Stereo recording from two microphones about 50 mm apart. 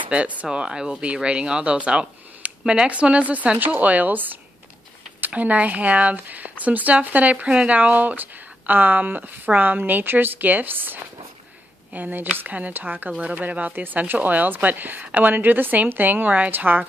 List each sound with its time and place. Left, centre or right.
0.1 s speech: right
0.5 s speech: centre; by 16.8 s right